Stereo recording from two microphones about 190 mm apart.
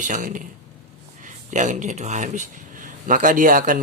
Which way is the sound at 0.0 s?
45° right (ahead or behind).